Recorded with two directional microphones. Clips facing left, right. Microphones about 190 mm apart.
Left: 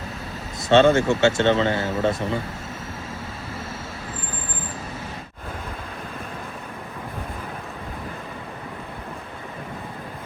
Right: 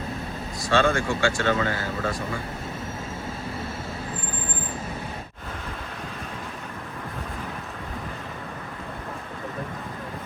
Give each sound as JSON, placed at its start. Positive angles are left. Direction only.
{"t": 0.7, "sound": "speech", "side_deg": 25}